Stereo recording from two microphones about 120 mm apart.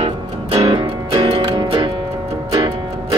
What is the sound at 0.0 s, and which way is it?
Music, 60° right (ahead or behind).